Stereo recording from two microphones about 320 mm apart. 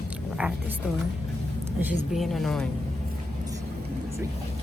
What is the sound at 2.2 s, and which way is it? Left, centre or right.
Speech, centre.